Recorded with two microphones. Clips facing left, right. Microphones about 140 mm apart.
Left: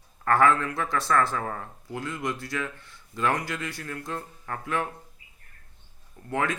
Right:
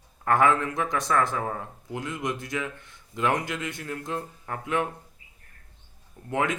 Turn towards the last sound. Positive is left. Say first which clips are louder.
# right 1 dB
turn(degrees=-20)  # may be behind; listen again after turning